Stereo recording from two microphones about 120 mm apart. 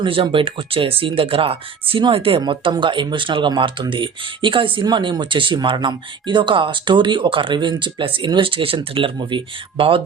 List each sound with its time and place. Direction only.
0.0 s speech: 45° right (ahead or behind)